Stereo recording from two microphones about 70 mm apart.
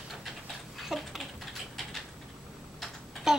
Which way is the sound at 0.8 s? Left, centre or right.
Centre.